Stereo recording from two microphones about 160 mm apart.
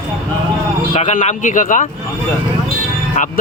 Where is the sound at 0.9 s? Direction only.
45° left (ahead or behind).